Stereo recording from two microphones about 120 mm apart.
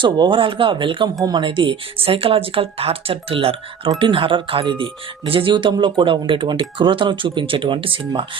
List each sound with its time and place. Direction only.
0.0 s speech: 45° right (ahead or behind)